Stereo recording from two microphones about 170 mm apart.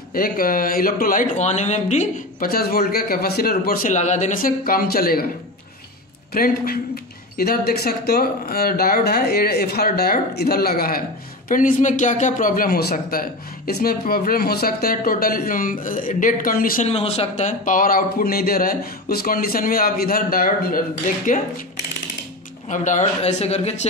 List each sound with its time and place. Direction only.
0.1 s speech: 60° left (ahead or behind)
2.4 s speech: 60° left (ahead or behind)
6.3 s speech: 60° left (ahead or behind)
16.8 s speech: 35° left (ahead or behind); by 20.8 s 60° left (ahead or behind)
22.7 s speech: 45° left (ahead or behind)